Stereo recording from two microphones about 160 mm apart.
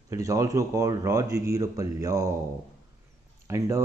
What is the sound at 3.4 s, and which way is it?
Speech, 20° right (ahead or behind).